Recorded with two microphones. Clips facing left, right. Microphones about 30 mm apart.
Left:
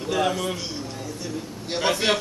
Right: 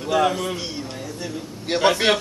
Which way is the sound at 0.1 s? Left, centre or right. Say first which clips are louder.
Right 4 dB; centre.